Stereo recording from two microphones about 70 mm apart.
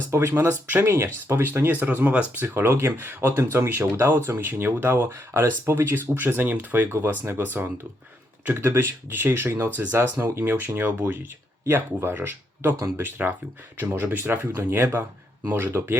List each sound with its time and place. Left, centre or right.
0.1 s speech: right